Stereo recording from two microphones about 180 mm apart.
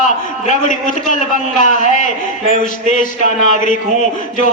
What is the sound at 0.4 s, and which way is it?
A man's voice, 45° left (ahead or behind).